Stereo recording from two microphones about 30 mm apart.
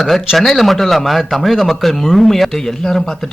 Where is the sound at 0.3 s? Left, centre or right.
Centre.